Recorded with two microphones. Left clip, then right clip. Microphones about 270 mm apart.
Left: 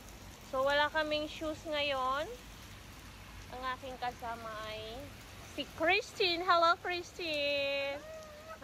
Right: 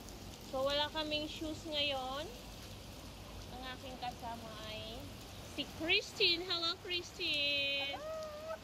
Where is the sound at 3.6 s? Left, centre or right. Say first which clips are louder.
Left 6 dB; centre.